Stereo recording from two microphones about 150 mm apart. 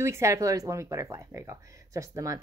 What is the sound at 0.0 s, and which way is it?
A woman's voice, 20° right (ahead or behind).